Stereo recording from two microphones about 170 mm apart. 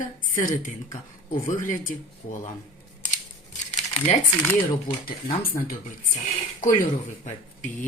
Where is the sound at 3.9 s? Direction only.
40° left (ahead or behind).